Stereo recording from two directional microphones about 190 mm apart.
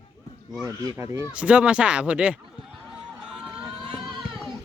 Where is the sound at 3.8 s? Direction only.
25° right (ahead or behind).